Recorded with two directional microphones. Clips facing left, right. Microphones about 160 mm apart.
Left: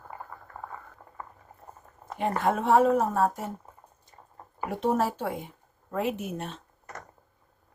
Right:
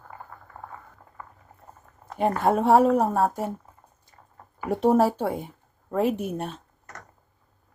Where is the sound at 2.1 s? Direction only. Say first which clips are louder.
Right 4 dB; 45° right (ahead or behind).